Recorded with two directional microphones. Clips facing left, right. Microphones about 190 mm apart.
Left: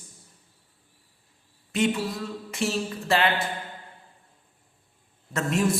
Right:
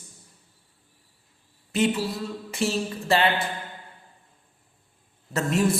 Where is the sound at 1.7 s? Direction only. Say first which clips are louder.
Right 1 dB; centre (ahead or behind).